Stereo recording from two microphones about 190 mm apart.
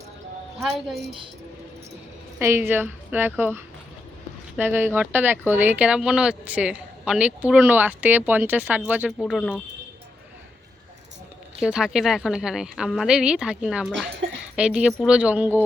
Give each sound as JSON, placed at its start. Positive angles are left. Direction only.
{"t": 0.6, "sound": "speech", "side_deg": 0}
{"t": 2.4, "sound": "a woman's voice", "side_deg": -15}
{"t": 9.1, "sound": "speech", "side_deg": 5}
{"t": 11.6, "sound": "a woman's voice", "side_deg": -5}